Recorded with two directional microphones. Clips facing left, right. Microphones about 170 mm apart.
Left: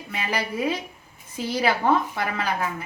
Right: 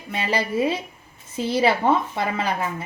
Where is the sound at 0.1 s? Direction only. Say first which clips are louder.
Right 4 dB; 30° right (ahead or behind).